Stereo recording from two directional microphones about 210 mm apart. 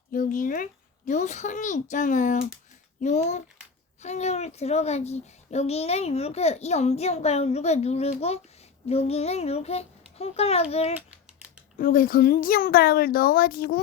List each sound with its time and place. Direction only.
0.1 s a child's voice: 40° left (ahead or behind)
11.8 s speech: 40° left (ahead or behind)